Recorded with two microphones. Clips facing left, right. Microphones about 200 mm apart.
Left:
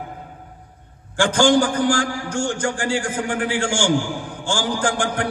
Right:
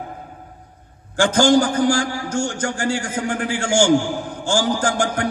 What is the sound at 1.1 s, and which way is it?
A man's voice, 40° right (ahead or behind).